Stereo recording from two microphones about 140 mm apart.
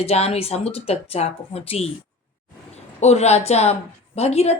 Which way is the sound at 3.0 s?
50° left (ahead or behind).